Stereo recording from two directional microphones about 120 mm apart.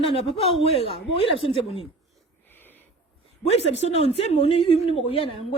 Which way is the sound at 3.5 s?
65° left (ahead or behind).